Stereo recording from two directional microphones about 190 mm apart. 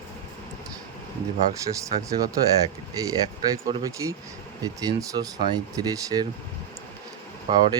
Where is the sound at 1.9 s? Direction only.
25° right (ahead or behind).